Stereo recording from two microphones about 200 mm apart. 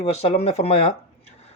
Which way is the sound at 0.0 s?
30° left (ahead or behind).